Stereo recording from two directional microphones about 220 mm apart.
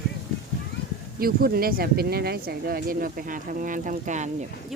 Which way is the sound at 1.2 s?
45° right (ahead or behind).